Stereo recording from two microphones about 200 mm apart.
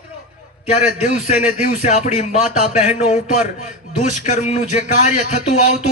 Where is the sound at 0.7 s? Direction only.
35° left (ahead or behind).